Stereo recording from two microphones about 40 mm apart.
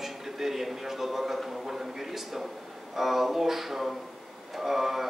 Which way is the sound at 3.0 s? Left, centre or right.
Centre.